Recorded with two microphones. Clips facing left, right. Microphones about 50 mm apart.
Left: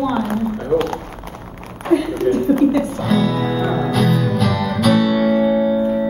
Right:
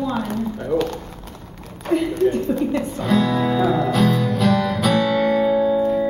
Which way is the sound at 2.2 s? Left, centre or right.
Left.